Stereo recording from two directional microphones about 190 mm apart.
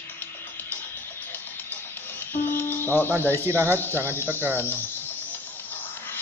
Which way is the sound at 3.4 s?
15° right (ahead or behind).